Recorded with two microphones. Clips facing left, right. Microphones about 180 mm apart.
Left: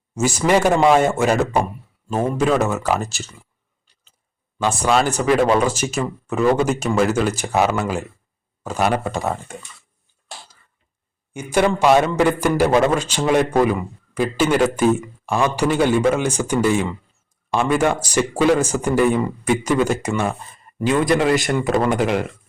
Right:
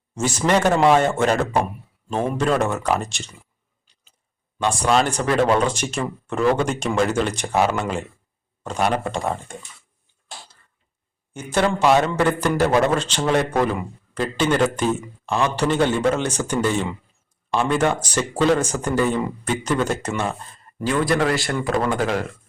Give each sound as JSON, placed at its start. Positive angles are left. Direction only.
{"t": 0.1, "sound": "speech", "side_deg": 10}
{"t": 4.7, "sound": "speech", "side_deg": 5}
{"t": 11.3, "sound": "speech", "side_deg": 10}
{"t": 20.9, "sound": "speech", "side_deg": 20}